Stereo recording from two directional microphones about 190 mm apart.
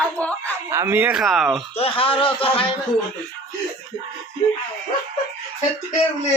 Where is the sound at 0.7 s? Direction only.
15° right (ahead or behind).